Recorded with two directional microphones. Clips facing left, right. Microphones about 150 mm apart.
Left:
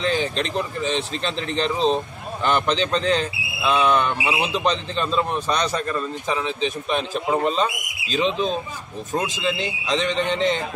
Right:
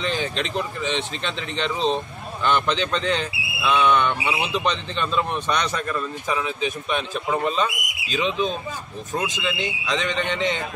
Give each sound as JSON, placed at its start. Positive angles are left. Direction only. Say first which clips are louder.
{"t": 0.0, "sound": "a man's voice", "louder": "left 3 dB", "side_deg": 35}